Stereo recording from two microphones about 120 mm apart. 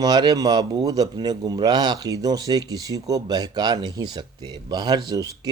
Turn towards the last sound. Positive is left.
turn(degrees=-30)  # may be behind; listen again after turning